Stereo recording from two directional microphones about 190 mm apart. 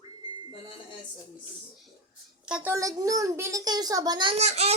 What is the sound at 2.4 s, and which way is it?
A child's voice, 5° right (ahead or behind).